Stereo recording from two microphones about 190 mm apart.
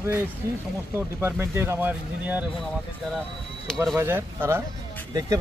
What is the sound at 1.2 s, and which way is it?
Speech, 15° right (ahead or behind).